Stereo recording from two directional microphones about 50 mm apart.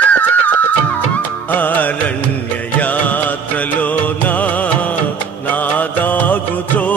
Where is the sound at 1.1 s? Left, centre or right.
Left.